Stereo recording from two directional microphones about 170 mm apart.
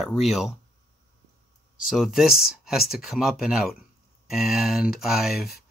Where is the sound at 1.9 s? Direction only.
Centre (ahead or behind).